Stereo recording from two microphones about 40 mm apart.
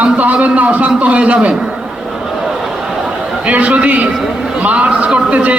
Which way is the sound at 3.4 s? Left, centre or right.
Right.